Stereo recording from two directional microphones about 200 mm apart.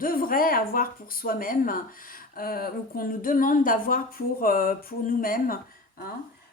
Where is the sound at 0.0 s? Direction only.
45° left (ahead or behind).